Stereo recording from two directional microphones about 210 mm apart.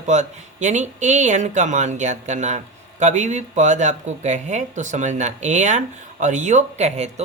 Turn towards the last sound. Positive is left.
turn(degrees=-30)  # may be behind; listen again after turning